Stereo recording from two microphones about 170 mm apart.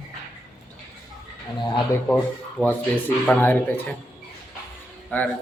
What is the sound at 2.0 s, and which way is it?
Speech, 10° left (ahead or behind).